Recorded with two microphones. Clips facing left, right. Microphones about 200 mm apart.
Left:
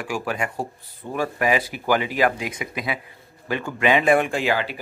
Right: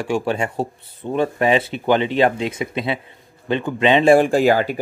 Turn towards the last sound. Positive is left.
turn(degrees=-45)  # may be behind; listen again after turning